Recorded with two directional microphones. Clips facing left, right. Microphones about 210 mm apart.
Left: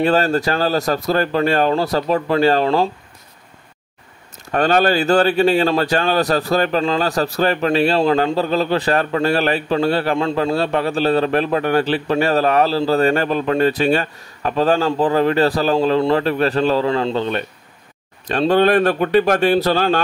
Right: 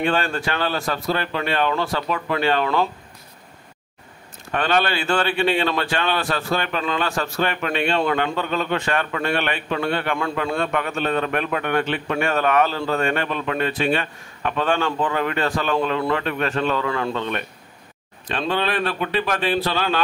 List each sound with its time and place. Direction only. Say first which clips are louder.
0.0 s a man's voice: left 6 dB; 40° left (ahead or behind)
4.5 s a man's voice: left 6 dB; 40° left (ahead or behind)
18.2 s speech: left 9 dB; 40° left (ahead or behind)